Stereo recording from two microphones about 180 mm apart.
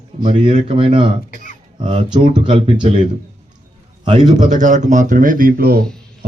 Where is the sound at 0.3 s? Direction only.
30° right (ahead or behind).